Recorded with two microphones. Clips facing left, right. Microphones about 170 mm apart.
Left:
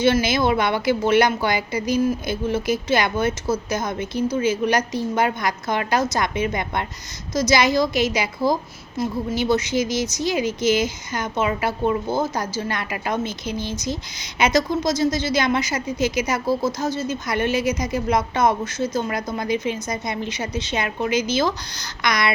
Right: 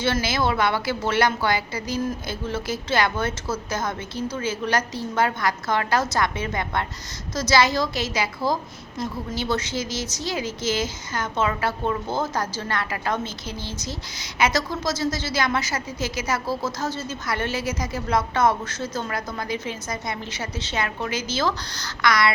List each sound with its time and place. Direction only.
0.0 s a woman's voice: 15° left (ahead or behind)